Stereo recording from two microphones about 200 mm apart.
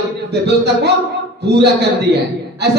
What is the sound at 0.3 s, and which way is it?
A woman's voice, 55° right (ahead or behind).